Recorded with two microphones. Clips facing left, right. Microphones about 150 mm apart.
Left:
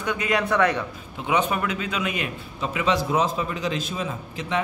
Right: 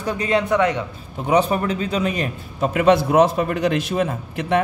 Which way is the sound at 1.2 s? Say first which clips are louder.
Right 5 dB; 35° right (ahead or behind).